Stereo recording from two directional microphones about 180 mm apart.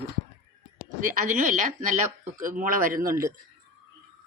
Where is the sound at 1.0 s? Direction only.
45° right (ahead or behind).